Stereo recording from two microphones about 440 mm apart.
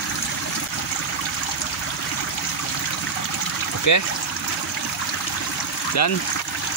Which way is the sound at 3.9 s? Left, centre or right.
Left.